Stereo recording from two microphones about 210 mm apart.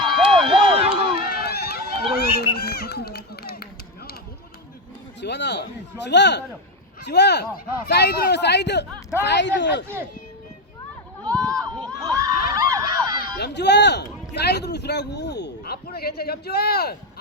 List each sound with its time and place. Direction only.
0.3 s a sound: 25° right (ahead or behind)
1.1 s run: 50° left (ahead or behind)
5.2 s speech: 55° left (ahead or behind)
11.3 s crowd: 15° right (ahead or behind)
13.4 s speech: 55° left (ahead or behind)